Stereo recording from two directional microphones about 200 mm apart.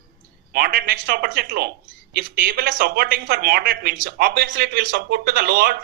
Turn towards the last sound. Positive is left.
turn(degrees=-50)  # may be behind; listen again after turning